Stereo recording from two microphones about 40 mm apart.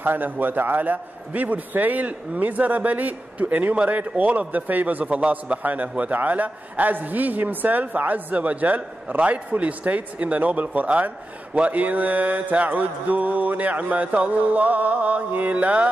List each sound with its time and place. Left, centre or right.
0.0 s a man's voice: right
3.7 s a man's voice: right
5.0 s mantra: right
5.6 s a man's voice: right
11.5 s mantra: right